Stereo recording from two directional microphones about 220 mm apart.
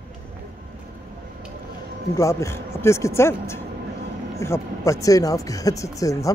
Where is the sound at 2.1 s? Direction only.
15° left (ahead or behind).